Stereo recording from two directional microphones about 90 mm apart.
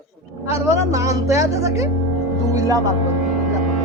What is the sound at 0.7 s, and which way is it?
A man's voice, 35° right (ahead or behind).